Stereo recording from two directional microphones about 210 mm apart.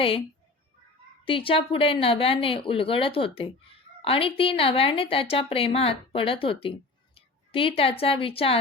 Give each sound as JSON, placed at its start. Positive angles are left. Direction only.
{"t": 1.2, "sound": "a woman's voice", "side_deg": 25}